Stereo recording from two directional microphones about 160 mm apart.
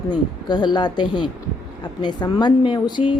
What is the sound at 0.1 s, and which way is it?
Speech, 25° left (ahead or behind).